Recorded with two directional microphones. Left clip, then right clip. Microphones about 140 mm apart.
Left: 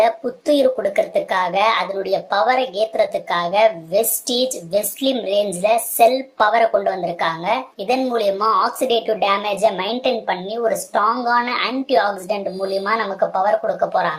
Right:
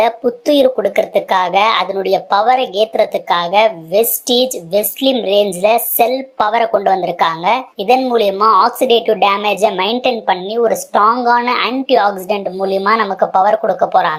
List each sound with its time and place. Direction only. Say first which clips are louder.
0.0 s speech: right 4 dB; 25° right (ahead or behind)